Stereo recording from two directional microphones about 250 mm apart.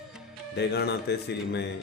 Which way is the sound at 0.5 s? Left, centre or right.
Left.